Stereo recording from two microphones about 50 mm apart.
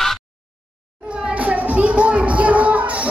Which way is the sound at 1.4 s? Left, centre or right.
Right.